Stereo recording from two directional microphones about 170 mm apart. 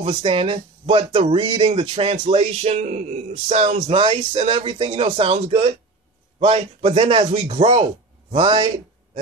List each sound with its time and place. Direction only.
0.0 s speech: 30° right (ahead or behind)